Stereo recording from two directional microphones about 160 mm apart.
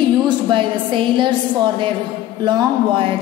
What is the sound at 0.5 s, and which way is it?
A woman's voice, 30° right (ahead or behind).